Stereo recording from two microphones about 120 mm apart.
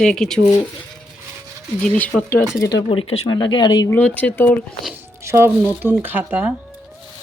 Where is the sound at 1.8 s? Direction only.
10° left (ahead or behind).